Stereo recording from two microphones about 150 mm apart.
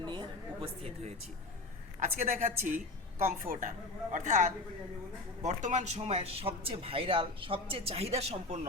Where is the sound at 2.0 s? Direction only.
65° right (ahead or behind).